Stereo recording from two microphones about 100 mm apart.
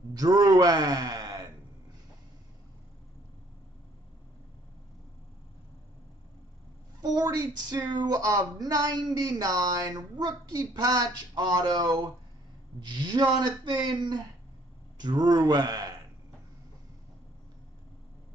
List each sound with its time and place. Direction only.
0.1 s speech: 40° right (ahead or behind)
7.0 s speech: 40° right (ahead or behind)